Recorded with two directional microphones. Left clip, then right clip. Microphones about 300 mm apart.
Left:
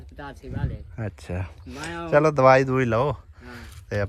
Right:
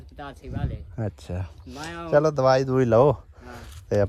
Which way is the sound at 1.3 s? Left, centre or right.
Centre.